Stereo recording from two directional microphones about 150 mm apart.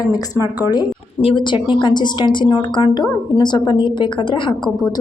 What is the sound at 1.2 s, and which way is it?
A woman's voice, 35° left (ahead or behind).